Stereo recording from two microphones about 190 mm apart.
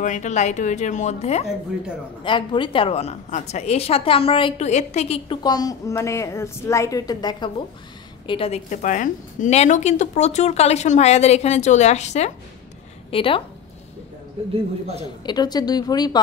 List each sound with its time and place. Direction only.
0.0 s a woman's voice: 40° left (ahead or behind)
2.2 s a woman's voice: 25° left (ahead or behind)
15.2 s a woman's voice: 20° left (ahead or behind)